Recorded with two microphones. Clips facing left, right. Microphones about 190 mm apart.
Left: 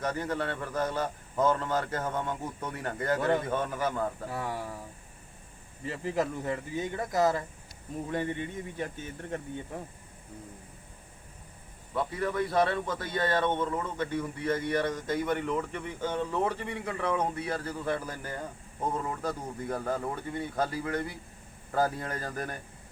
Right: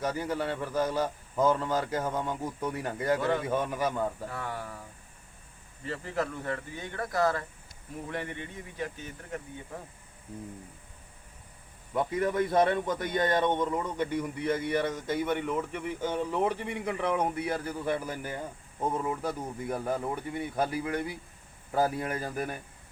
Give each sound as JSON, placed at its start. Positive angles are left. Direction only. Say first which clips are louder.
{"t": 0.0, "sound": "a man's voice", "louder": "right 1 dB", "side_deg": -10}
{"t": 4.3, "sound": "speech", "louder": "left 2 dB", "side_deg": 25}
{"t": 5.8, "sound": "speech", "louder": "left 2 dB", "side_deg": 20}
{"t": 11.9, "sound": "a man's voice", "louder": "right 3 dB", "side_deg": -20}